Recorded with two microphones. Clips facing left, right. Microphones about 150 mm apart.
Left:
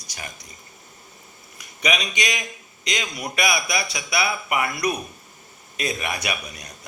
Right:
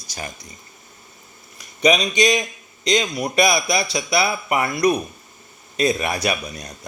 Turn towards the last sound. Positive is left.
turn(degrees=-30)  # may be behind; listen again after turning